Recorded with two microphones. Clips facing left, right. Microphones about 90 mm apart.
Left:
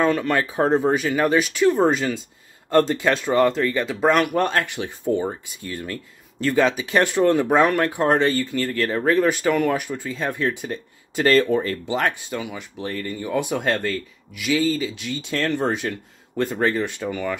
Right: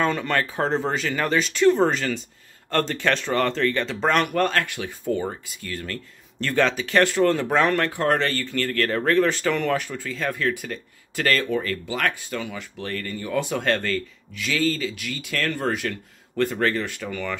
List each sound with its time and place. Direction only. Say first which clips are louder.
0.0 s speech: left 3 dB; 5° left (ahead or behind)
6.4 s speech: left 3 dB; 10° left (ahead or behind)